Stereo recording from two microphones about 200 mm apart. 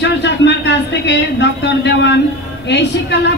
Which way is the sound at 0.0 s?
60° left (ahead or behind).